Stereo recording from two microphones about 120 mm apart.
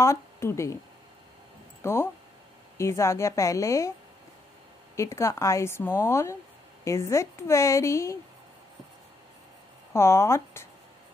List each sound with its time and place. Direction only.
0.0 s speech: 20° left (ahead or behind)
1.8 s a woman's voice: 20° left (ahead or behind)
4.9 s a woman's voice: 25° left (ahead or behind)
9.9 s a woman's voice: 20° left (ahead or behind)